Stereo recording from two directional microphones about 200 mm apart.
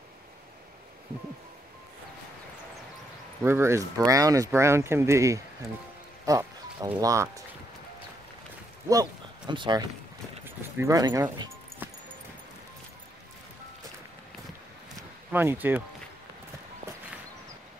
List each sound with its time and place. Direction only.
3.4 s speech: 10° right (ahead or behind)
8.8 s speech: 20° right (ahead or behind)
10.4 s music: 15° right (ahead or behind)
15.3 s speech: 10° right (ahead or behind)